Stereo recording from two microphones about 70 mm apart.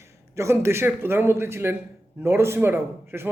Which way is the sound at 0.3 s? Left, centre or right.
Right.